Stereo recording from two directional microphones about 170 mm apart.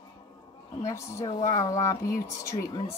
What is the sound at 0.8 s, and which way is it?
Speech, 15° left (ahead or behind).